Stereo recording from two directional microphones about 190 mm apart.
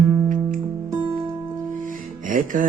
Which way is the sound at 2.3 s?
45° right (ahead or behind).